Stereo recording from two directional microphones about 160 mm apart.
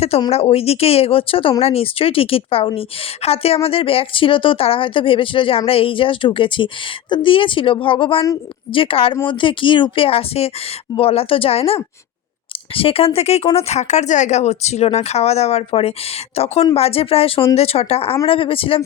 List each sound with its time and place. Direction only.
0.3 s a woman's voice: 40° left (ahead or behind)